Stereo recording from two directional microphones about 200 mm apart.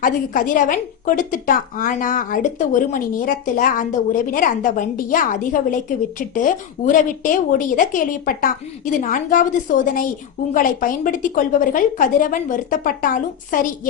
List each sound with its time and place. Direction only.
0.0 s a woman's voice: 40° left (ahead or behind)